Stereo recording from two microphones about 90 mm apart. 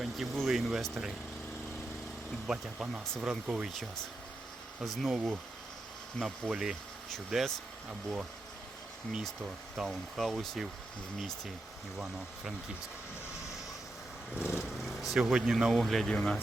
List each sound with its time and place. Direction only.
0.0 s speech: centre (ahead or behind)
2.5 s speech: 10° right (ahead or behind)
9.4 s speech: 5° right (ahead or behind)
11.9 s speech: 5° right (ahead or behind)
14.3 s speech: 10° right (ahead or behind); by 16.4 s 10° left (ahead or behind)